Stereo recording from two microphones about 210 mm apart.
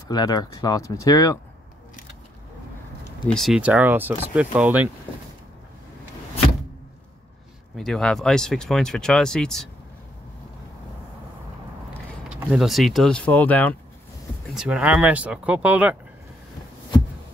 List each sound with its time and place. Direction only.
0.1 s speech: 20° left (ahead or behind)
3.3 s speech: centre (ahead or behind)
7.7 s speech: centre (ahead or behind)
12.3 s speech: centre (ahead or behind)
14.5 s speech: 5° right (ahead or behind)